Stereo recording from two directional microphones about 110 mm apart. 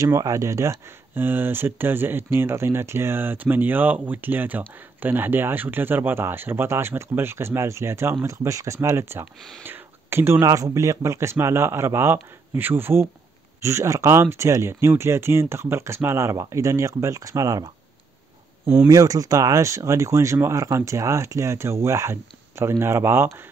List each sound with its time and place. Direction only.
0.0 s speech: 30° right (ahead or behind)
18.9 s speech: 35° right (ahead or behind)